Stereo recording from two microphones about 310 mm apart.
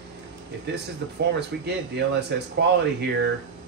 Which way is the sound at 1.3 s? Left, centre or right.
Right.